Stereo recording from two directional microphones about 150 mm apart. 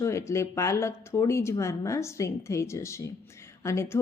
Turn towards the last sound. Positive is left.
turn(degrees=20)  # may be behind; listen again after turning